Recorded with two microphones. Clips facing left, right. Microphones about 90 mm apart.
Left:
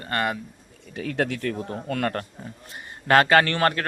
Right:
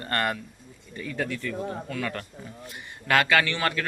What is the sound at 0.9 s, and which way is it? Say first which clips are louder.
Speech: left 5 dB; 70° left (ahead or behind).